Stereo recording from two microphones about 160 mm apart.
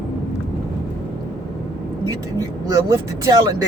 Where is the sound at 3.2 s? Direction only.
20° right (ahead or behind).